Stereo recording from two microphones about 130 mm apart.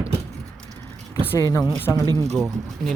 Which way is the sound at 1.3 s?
25° left (ahead or behind).